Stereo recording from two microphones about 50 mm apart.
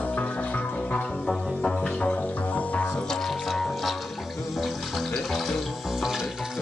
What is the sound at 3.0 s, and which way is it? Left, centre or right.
Music, centre.